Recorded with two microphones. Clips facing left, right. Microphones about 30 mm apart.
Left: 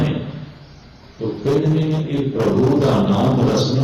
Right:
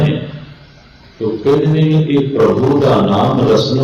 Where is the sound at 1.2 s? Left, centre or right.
Right.